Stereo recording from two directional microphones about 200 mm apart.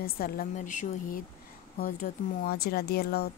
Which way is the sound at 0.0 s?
45° left (ahead or behind).